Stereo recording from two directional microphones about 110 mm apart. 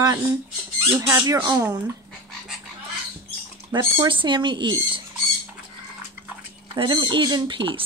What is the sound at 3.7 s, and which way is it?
Speech, 35° right (ahead or behind).